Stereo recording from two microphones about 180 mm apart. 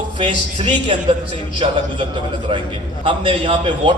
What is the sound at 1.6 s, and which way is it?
A man's voice, 30° right (ahead or behind).